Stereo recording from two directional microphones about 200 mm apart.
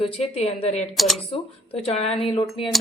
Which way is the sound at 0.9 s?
Centre (ahead or behind).